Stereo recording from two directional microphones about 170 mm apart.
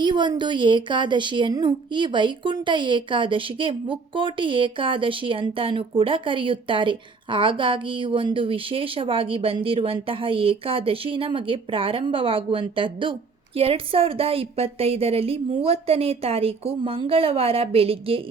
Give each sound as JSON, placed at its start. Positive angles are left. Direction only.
{"t": 0.0, "sound": "a woman's voice", "side_deg": -25}